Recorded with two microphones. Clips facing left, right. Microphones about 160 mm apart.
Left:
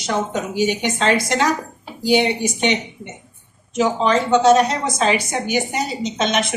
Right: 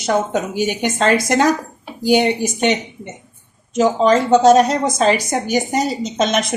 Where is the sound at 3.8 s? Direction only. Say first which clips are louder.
Right 4 dB; 40° right (ahead or behind).